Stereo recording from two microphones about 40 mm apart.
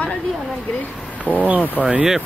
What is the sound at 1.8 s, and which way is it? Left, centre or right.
Speech, left.